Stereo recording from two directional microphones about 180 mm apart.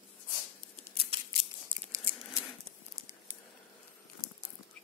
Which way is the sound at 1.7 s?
25° right (ahead or behind).